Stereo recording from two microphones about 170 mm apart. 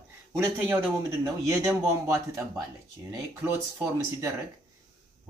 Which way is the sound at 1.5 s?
20° right (ahead or behind).